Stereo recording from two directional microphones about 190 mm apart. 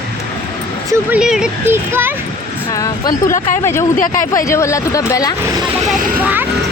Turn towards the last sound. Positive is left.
turn(degrees=-10)  # may be behind; listen again after turning